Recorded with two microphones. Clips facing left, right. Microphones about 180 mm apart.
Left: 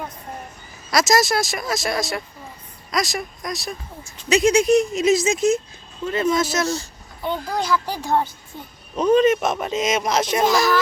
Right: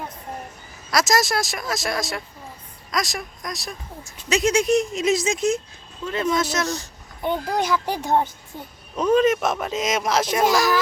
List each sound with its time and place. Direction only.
0.9 s speech: centre (ahead or behind)
6.7 s a child's voice: 15° right (ahead or behind)
9.0 s speech: centre (ahead or behind)